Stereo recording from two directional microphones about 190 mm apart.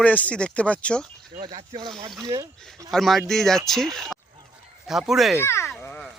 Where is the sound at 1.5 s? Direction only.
20° right (ahead or behind).